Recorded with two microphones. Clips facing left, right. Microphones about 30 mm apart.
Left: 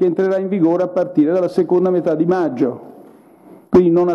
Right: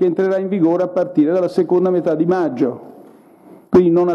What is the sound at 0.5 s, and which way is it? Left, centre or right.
A man's voice, centre.